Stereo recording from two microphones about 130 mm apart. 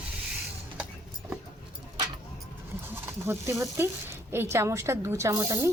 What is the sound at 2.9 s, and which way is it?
Speech, 20° right (ahead or behind).